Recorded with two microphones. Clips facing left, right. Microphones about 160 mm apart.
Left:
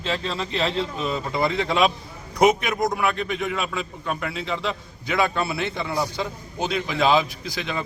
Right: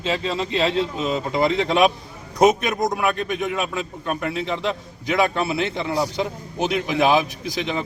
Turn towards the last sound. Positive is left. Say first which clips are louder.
# right 4 dB
turn(degrees=-20)  # may be behind; listen again after turning